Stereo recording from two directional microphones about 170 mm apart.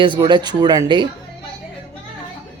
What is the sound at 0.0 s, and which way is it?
Speech, 30° right (ahead or behind).